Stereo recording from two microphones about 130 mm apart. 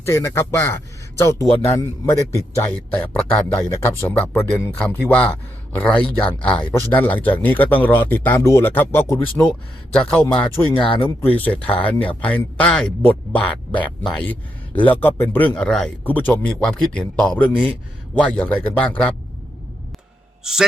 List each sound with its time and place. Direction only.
0.0 s a man's voice: 20° left (ahead or behind)
9.4 s speech: 5° left (ahead or behind)
10.8 s speech: 40° left (ahead or behind)
11.3 s speech: 10° left (ahead or behind)
20.4 s speech: 5° right (ahead or behind)